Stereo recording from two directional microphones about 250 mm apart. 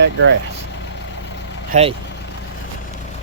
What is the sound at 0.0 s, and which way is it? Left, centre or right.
Speech, right.